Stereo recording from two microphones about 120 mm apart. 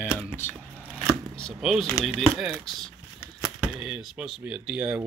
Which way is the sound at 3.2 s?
25° left (ahead or behind).